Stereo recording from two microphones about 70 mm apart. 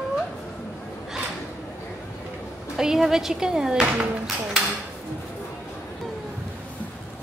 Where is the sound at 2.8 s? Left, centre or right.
Centre.